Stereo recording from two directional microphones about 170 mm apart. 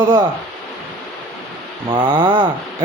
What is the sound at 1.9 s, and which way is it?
Speech, 25° right (ahead or behind).